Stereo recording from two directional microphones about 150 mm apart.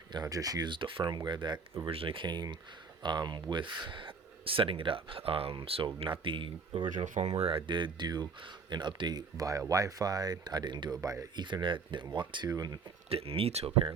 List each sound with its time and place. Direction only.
0.1 s speech: 25° right (ahead or behind)
6.9 s speech: 55° right (ahead or behind); by 12.8 s 25° right (ahead or behind)
13.1 s speech: 40° right (ahead or behind)